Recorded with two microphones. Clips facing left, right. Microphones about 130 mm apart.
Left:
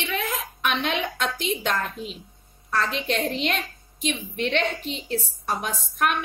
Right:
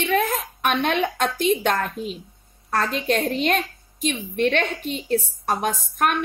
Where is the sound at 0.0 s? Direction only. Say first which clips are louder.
Right 7 dB; 45° right (ahead or behind).